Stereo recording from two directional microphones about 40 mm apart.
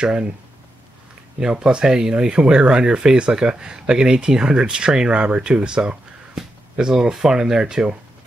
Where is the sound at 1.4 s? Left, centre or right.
Centre.